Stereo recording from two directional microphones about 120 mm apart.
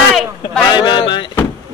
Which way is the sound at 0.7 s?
40° left (ahead or behind).